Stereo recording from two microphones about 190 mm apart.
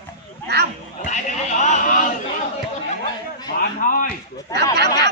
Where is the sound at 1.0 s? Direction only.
40° left (ahead or behind).